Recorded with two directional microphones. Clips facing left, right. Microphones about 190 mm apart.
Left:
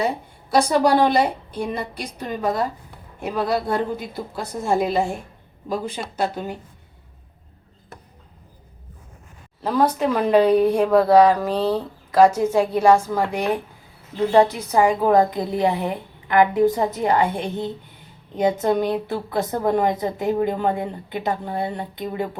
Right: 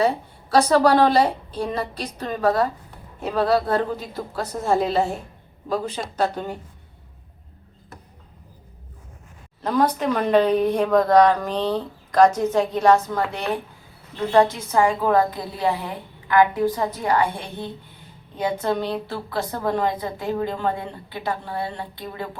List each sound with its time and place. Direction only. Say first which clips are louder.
0.5 s speech: right 1 dB; 15° left (ahead or behind)
9.6 s a woman's voice: left 1 dB; 5° left (ahead or behind)